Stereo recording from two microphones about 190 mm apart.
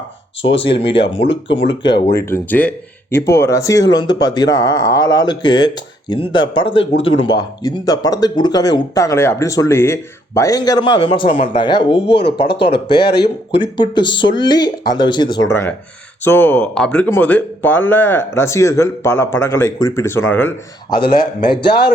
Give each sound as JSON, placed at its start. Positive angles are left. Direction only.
{"t": 0.5, "sound": "speech", "side_deg": 30}
{"t": 2.1, "sound": "speech", "side_deg": 10}
{"t": 12.2, "sound": "speech", "side_deg": 60}
{"t": 13.5, "sound": "speech", "side_deg": 25}
{"t": 20.9, "sound": "speech", "side_deg": 50}
{"t": 21.2, "sound": "speech", "side_deg": 25}